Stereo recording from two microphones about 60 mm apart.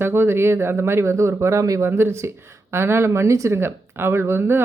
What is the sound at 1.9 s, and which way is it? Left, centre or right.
Speech, right.